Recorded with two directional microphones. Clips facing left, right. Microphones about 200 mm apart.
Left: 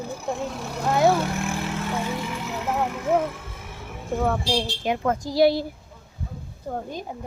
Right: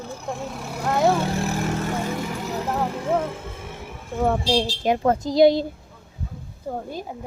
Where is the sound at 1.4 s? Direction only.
40° right (ahead or behind).